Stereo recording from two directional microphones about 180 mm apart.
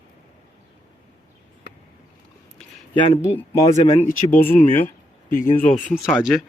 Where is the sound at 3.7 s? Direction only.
40° left (ahead or behind).